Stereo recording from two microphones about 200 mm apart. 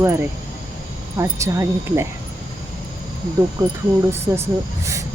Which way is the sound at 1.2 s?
15° right (ahead or behind).